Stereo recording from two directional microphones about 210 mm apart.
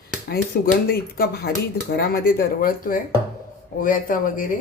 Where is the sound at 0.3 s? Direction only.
45° left (ahead or behind).